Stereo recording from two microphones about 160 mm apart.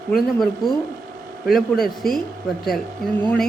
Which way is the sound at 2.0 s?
70° left (ahead or behind).